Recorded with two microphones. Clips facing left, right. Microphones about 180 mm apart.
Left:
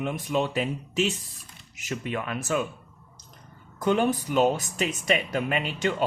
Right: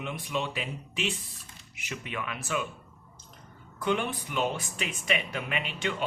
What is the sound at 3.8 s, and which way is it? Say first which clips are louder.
Speech: left 6 dB; 40° left (ahead or behind).